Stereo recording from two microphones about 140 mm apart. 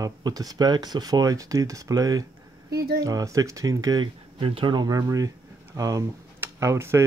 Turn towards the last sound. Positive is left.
turn(degrees=-20)  # may be behind; listen again after turning